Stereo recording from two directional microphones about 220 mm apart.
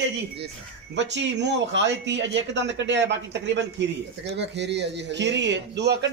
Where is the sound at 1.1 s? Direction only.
55° right (ahead or behind).